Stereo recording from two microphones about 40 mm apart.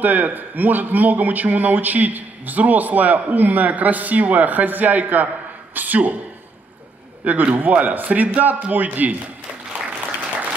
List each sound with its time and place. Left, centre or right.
0.0 s speech: right
7.2 s speech: right